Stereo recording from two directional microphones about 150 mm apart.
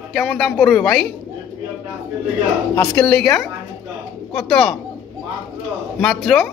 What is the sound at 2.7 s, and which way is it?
Speech, 15° left (ahead or behind).